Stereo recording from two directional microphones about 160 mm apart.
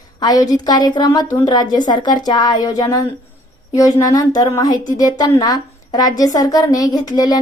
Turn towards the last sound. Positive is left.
turn(degrees=25)  # may be behind; listen again after turning